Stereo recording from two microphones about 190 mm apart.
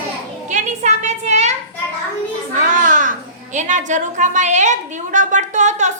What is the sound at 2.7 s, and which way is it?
A child's voice, 40° right (ahead or behind).